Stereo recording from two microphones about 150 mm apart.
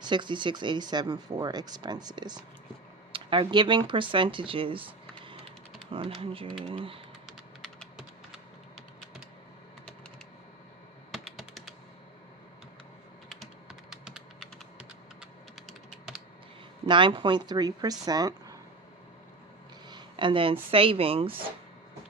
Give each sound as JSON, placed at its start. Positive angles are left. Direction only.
{"t": 0.0, "sound": "speech", "side_deg": -30}
{"t": 5.9, "sound": "speech", "side_deg": -35}
{"t": 7.3, "sound": "typing", "side_deg": 0}
{"t": 11.1, "sound": "computer keyboard", "side_deg": 0}
{"t": 13.2, "sound": "computer keyboard", "side_deg": 0}
{"t": 16.9, "sound": "speech", "side_deg": -35}
{"t": 19.9, "sound": "speech", "side_deg": -30}